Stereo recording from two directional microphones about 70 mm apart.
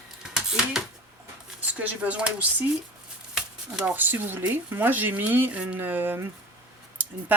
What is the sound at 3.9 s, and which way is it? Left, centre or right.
Speech, right.